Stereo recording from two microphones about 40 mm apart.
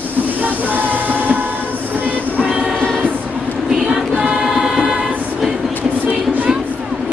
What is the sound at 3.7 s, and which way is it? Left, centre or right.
Choir, centre.